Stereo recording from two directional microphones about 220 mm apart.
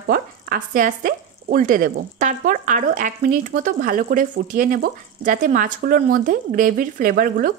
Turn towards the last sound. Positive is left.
turn(degrees=-40)  # may be behind; listen again after turning